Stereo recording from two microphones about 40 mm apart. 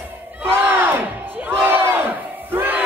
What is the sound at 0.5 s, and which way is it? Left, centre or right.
Crowd, right.